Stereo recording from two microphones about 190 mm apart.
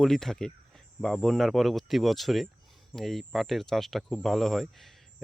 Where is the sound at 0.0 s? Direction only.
Centre (ahead or behind).